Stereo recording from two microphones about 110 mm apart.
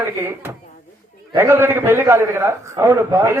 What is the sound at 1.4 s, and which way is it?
A man's voice, 20° right (ahead or behind).